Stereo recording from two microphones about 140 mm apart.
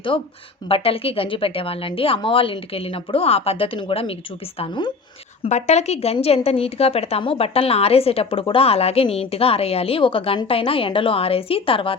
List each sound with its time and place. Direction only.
0.7 s a woman's voice: 40° left (ahead or behind)
5.4 s a woman's voice: 55° left (ahead or behind)